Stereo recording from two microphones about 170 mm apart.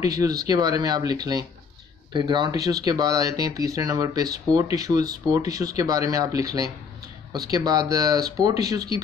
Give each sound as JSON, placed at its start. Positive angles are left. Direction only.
{"t": 0.0, "sound": "speech", "side_deg": -20}